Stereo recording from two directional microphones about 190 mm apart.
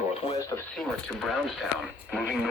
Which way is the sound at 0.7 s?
Centre (ahead or behind).